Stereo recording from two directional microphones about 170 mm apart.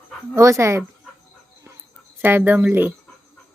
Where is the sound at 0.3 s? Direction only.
15° right (ahead or behind).